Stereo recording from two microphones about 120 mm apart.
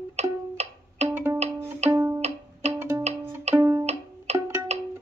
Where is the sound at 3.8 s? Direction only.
65° right (ahead or behind).